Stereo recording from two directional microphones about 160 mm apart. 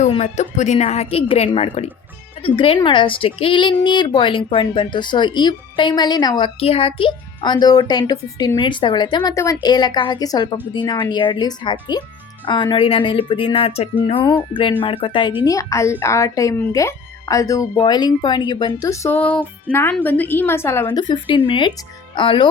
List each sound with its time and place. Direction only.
0.2 s a woman's voice: 45° left (ahead or behind); by 6.5 s 25° left (ahead or behind)
6.6 s a woman's voice: 35° left (ahead or behind)
15.4 s a woman's voice: 20° left (ahead or behind)
20.8 s speech: 25° left (ahead or behind)